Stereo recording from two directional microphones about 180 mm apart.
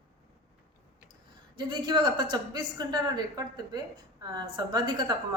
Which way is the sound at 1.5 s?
25° right (ahead or behind).